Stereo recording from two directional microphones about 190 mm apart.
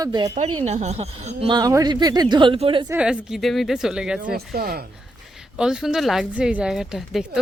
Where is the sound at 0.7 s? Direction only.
35° right (ahead or behind).